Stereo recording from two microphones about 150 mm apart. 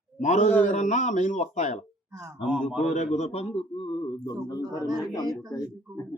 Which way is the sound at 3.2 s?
45° left (ahead or behind).